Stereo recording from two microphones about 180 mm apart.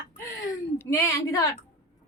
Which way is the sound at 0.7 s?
20° left (ahead or behind).